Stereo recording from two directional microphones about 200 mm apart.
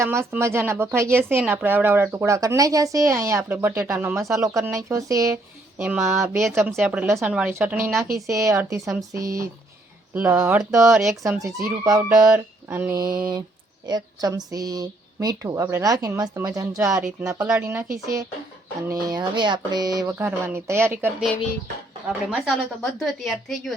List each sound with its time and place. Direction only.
0.0 s speech: 15° right (ahead or behind)
10.2 s a woman's voice: 5° right (ahead or behind)
11.2 s speech: 15° right (ahead or behind)
22.3 s a woman's voice: centre (ahead or behind)